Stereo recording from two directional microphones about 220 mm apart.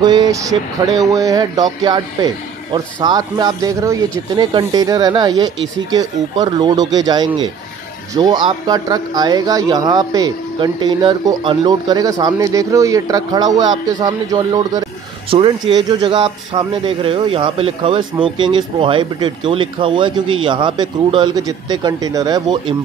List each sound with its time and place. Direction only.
0.0 s speech: 20° right (ahead or behind)